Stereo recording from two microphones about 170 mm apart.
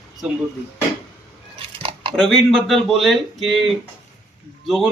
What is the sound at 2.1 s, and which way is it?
Speech, centre (ahead or behind).